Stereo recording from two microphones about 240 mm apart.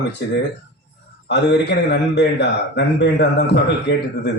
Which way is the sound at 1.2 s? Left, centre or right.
Left.